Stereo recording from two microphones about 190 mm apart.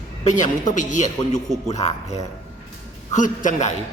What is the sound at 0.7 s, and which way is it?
A man's voice, 40° left (ahead or behind).